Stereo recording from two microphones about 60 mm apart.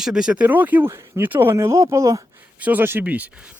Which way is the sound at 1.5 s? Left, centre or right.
Right.